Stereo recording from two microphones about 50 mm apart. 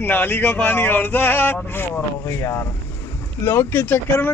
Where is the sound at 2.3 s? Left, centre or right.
Left.